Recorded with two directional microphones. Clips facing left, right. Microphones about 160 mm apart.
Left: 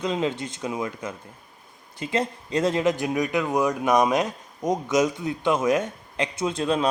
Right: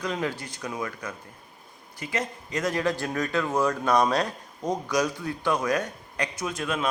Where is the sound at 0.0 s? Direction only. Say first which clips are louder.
Left 4 dB; 20° left (ahead or behind).